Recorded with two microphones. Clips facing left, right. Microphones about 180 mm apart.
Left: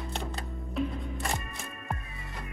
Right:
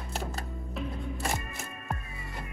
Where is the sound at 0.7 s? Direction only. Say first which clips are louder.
Left 4 dB; centre (ahead or behind).